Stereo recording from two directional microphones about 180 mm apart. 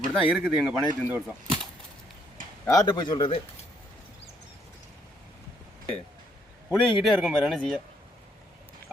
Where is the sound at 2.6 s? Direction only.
20° left (ahead or behind).